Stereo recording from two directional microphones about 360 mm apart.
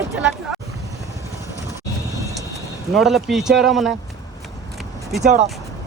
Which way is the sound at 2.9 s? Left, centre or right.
Centre.